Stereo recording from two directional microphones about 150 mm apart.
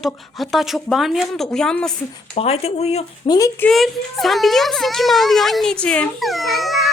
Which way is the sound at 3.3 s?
25° left (ahead or behind).